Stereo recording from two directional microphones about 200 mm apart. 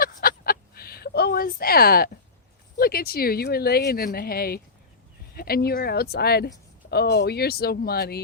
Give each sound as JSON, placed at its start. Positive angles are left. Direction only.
{"t": 0.0, "sound": "fowl", "side_deg": 45}
{"t": 2.7, "sound": "speech", "side_deg": 50}